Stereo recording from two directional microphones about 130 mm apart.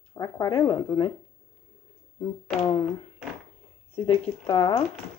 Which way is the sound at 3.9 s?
45° left (ahead or behind).